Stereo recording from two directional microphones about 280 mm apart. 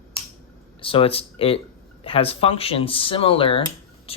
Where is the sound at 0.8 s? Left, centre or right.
Centre.